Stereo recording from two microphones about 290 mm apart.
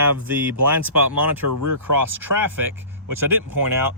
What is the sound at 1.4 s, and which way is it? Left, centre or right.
Speech, right.